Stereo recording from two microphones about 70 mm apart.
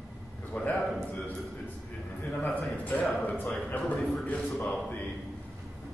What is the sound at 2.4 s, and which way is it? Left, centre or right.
A man's voice, left.